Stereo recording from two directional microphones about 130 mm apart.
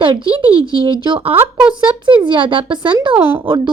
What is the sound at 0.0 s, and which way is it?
Speech, 40° right (ahead or behind).